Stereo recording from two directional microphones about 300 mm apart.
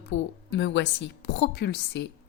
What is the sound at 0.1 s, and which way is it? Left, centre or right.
Speech, left.